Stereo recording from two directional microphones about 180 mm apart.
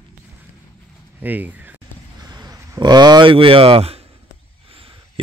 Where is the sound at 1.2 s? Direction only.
10° right (ahead or behind).